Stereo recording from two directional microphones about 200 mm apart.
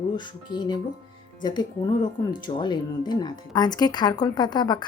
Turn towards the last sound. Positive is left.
turn(degrees=20)  # may be behind; listen again after turning